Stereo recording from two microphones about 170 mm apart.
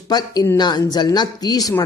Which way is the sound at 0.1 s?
25° left (ahead or behind).